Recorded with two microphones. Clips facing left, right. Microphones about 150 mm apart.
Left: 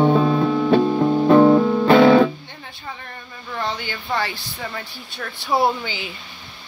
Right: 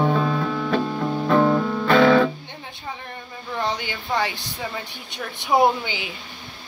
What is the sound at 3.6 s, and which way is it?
Speech, 15° right (ahead or behind).